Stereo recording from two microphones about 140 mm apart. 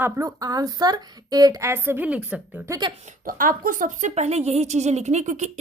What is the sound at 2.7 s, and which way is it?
Speech, 35° right (ahead or behind).